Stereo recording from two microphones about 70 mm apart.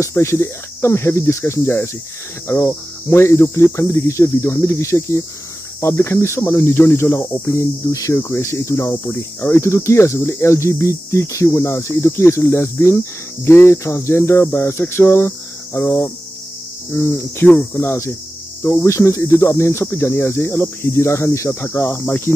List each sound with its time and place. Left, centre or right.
0.1 s speech: left
7.5 s speech: left
16.9 s speech: left
18.9 s speech: left